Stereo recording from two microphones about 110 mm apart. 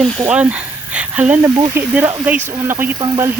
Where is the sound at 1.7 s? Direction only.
20° right (ahead or behind).